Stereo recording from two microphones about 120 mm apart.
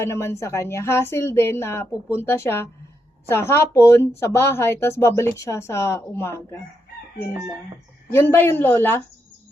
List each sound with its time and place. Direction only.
0.0 s speech: 20° left (ahead or behind)
8.1 s speech: 20° left (ahead or behind)